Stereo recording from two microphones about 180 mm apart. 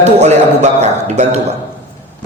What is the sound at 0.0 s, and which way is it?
Speech, 40° right (ahead or behind).